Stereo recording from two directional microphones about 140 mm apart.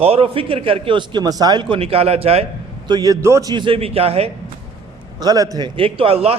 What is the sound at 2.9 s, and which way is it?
A man's voice, 25° right (ahead or behind).